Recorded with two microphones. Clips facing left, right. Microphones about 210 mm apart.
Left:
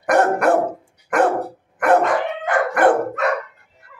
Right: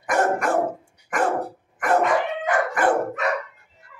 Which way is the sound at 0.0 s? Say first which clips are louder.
Left 5 dB; 60° left (ahead or behind).